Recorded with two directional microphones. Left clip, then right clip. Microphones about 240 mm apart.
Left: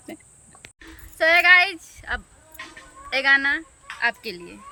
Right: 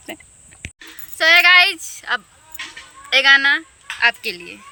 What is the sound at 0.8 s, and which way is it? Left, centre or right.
Speech, centre.